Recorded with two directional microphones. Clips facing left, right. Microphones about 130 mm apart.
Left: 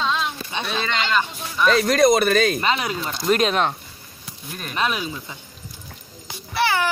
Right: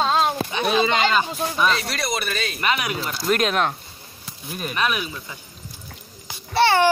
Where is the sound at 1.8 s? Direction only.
45° left (ahead or behind).